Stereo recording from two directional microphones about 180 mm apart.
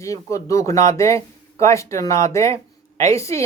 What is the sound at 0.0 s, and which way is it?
A woman's voice, 15° left (ahead or behind).